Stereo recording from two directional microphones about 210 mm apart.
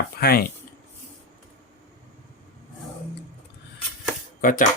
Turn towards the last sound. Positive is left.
turn(degrees=40)  # may be behind; listen again after turning